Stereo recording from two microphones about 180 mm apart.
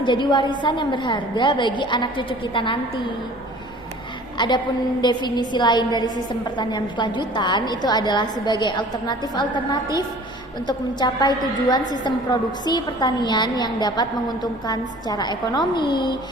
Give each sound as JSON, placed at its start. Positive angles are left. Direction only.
{"t": 0.0, "sound": "a woman's voice", "side_deg": 25}
{"t": 4.4, "sound": "a woman's voice", "side_deg": 25}